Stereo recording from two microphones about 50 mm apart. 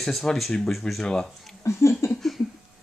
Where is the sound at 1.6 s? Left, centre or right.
Left.